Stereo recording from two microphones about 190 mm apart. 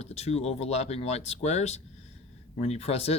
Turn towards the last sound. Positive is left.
turn(degrees=30)  # may be behind; listen again after turning